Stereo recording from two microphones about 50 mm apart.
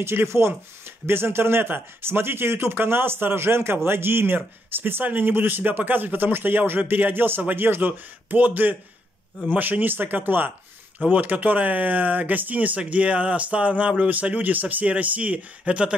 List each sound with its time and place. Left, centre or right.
0.0 s speech: right